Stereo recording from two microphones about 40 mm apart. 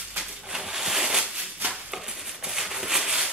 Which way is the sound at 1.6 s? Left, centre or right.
Right.